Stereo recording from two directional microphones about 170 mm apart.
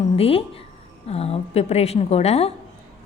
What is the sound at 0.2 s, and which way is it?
Speech, 35° left (ahead or behind).